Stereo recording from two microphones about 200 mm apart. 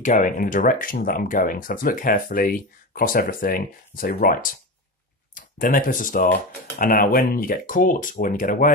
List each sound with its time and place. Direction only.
0.0 s speech: 40° left (ahead or behind)